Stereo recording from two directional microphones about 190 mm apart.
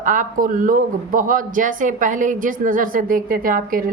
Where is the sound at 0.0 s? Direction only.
40° right (ahead or behind).